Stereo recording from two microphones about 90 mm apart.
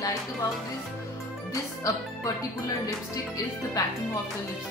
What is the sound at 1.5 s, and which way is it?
Speech, 40° left (ahead or behind).